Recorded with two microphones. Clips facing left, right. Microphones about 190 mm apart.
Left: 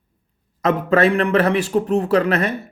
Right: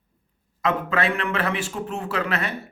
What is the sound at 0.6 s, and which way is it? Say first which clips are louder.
Speech: left 7 dB; 40° left (ahead or behind).